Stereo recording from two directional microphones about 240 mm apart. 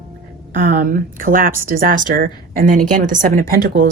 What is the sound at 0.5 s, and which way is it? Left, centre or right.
A woman's voice, right.